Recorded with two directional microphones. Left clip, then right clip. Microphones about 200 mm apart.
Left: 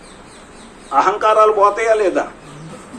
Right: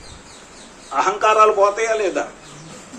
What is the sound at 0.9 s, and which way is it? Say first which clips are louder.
A man's voice: left 3 dB; 50° left (ahead or behind).